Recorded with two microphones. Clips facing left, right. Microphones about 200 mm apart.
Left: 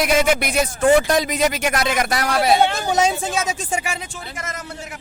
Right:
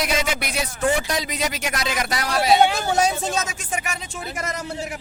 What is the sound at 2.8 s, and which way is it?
Speech, 20° left (ahead or behind).